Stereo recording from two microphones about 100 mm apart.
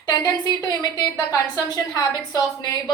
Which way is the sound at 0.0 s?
45° left (ahead or behind).